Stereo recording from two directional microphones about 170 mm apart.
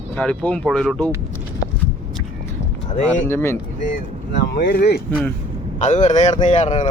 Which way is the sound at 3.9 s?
75° left (ahead or behind).